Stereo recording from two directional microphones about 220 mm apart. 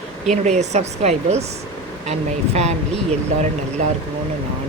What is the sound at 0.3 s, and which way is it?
A woman's voice, 30° right (ahead or behind).